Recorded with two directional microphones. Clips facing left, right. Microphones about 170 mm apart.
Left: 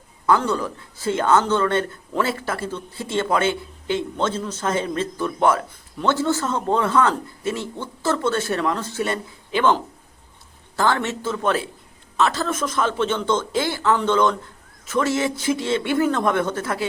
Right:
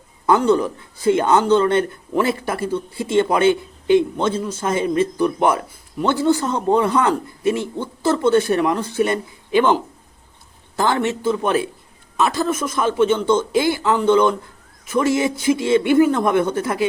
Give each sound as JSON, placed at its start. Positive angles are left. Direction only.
{"t": 0.3, "sound": "speech", "side_deg": -20}
{"t": 10.8, "sound": "speech", "side_deg": -15}